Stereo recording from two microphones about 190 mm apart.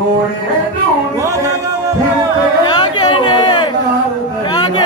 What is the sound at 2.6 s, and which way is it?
Chatter, 25° left (ahead or behind).